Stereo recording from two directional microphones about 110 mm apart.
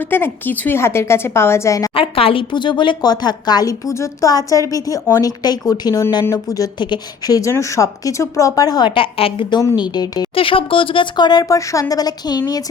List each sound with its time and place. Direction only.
0.0 s a woman's voice: 20° left (ahead or behind)
1.9 s a woman's voice: 55° left (ahead or behind); by 8.9 s 35° left (ahead or behind)
9.0 s a woman's voice: 55° left (ahead or behind); by 10.2 s 40° left (ahead or behind)
10.3 s speech: 55° left (ahead or behind); by 12.6 s 35° left (ahead or behind)